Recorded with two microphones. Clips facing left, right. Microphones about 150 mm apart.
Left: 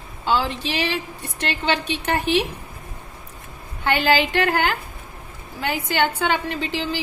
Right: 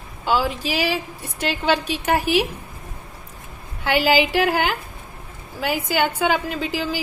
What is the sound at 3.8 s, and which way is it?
A woman's voice, 10° right (ahead or behind).